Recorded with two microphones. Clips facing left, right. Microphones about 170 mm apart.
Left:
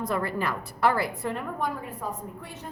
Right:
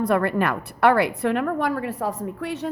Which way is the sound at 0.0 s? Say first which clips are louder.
Right 7 dB; 65° right (ahead or behind).